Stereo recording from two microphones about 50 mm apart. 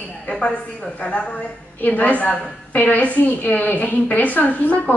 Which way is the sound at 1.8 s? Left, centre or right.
Left.